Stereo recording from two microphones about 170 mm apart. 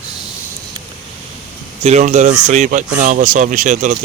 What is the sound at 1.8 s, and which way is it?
Speech, 40° right (ahead or behind).